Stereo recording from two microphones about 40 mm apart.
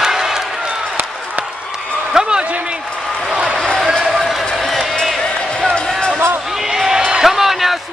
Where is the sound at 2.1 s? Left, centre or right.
Right.